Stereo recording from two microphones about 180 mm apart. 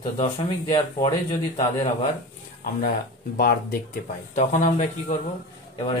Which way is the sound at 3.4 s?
55° left (ahead or behind).